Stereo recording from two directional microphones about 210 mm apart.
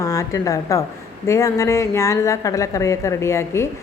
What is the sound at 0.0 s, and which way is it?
A woman's voice, 15° left (ahead or behind).